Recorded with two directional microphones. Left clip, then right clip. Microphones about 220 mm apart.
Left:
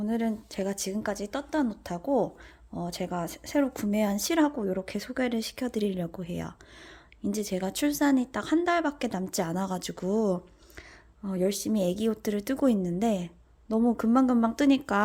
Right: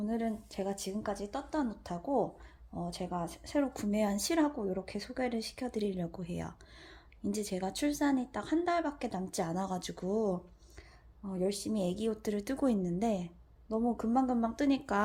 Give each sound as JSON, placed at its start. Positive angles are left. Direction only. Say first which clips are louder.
{"t": 0.0, "sound": "a woman's voice", "louder": "left 5 dB", "side_deg": 25}